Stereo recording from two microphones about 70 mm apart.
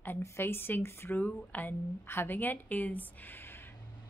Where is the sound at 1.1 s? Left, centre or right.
Left.